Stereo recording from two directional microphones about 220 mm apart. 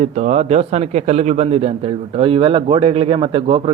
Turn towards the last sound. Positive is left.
turn(degrees=-25)  # may be behind; listen again after turning